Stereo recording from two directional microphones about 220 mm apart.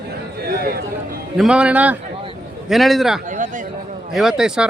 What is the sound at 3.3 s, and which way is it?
Speech, 35° right (ahead or behind).